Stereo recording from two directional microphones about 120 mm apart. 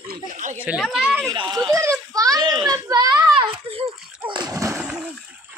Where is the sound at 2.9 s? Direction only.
35° right (ahead or behind).